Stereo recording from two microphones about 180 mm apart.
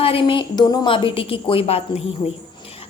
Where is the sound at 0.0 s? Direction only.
30° left (ahead or behind).